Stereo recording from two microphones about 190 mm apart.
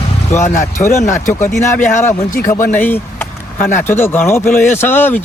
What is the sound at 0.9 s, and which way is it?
Speech, 40° left (ahead or behind).